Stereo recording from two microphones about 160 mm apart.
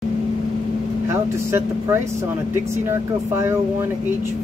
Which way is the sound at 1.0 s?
15° right (ahead or behind).